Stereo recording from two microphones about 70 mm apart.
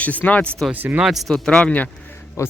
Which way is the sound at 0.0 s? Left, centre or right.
Left.